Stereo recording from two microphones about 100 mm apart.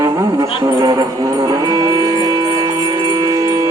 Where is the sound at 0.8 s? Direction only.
40° right (ahead or behind).